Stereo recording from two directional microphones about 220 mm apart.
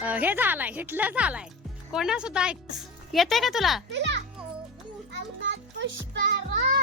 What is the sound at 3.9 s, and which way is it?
Speech, 55° right (ahead or behind).